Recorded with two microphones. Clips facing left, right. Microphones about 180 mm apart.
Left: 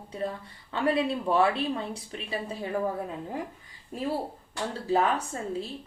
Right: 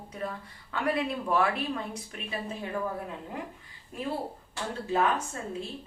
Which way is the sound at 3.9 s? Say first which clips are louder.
Left 3 dB; 40° left (ahead or behind).